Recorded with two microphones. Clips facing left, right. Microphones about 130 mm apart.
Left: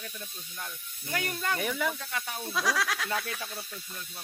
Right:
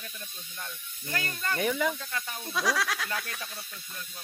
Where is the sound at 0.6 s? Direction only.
10° left (ahead or behind).